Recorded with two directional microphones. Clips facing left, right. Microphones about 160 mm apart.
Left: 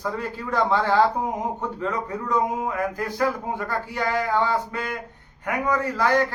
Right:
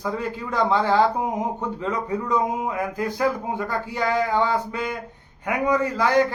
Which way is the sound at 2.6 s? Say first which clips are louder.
Right 1 dB; 15° right (ahead or behind).